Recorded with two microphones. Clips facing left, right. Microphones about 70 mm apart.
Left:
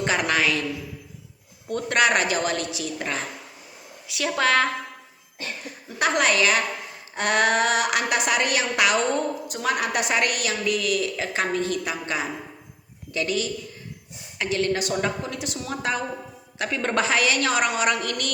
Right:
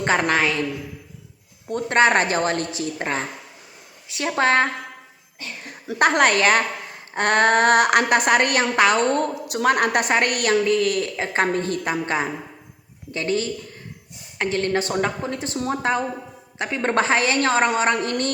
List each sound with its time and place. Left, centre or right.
0.0 s a woman's voice: right
1.6 s a woman's voice: right
6.0 s a woman's voice: right
9.1 s a woman's voice: right